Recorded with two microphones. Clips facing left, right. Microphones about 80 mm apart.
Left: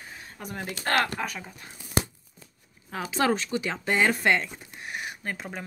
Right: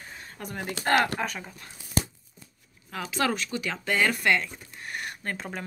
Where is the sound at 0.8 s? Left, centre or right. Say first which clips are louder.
Right 2 dB; centre.